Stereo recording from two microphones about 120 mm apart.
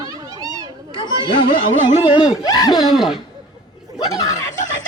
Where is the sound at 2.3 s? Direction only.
30° left (ahead or behind).